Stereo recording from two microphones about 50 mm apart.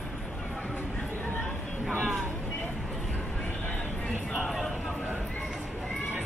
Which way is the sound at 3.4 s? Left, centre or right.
Left.